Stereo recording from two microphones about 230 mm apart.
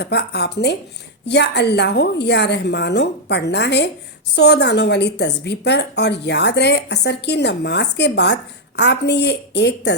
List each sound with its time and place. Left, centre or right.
0.0 s a woman's voice: left